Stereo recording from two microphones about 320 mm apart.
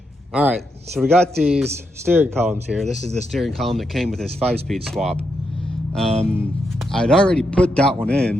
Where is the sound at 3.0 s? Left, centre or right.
Centre.